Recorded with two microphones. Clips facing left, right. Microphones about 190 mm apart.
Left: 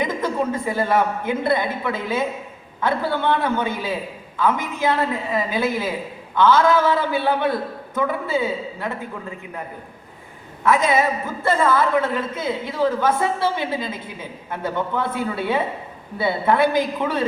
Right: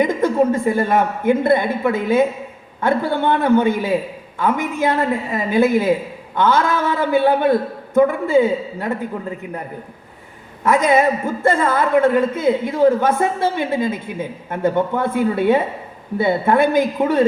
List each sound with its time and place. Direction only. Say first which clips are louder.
0.7 s a woman's voice: right 3 dB; 50° right (ahead or behind)
10.6 s a woman's voice: right 3 dB; 45° right (ahead or behind)